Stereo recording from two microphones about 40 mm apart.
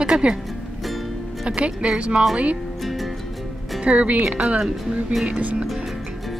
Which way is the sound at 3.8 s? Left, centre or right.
Right.